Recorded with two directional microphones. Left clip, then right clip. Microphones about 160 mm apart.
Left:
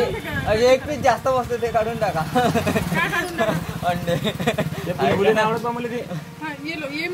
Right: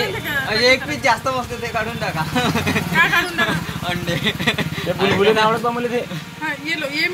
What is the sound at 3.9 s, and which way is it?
Speech, 65° left (ahead or behind).